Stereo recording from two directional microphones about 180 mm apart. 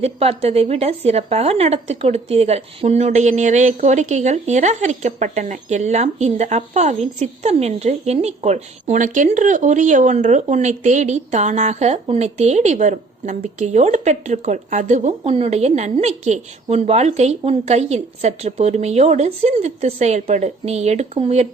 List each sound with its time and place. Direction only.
0.0 s a woman's voice: 35° right (ahead or behind)